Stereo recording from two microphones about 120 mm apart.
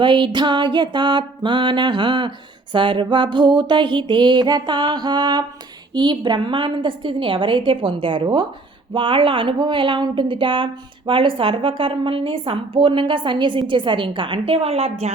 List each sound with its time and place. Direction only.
0.0 s speech: 40° right (ahead or behind)
0.3 s music: 40° right (ahead or behind)
5.9 s speech: 40° right (ahead or behind); by 15.1 s 60° right (ahead or behind)